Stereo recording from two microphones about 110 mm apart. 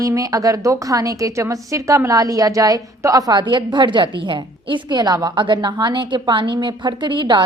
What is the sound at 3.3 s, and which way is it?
A woman's voice, 45° right (ahead or behind).